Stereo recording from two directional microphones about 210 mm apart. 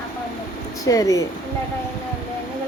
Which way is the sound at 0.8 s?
15° left (ahead or behind).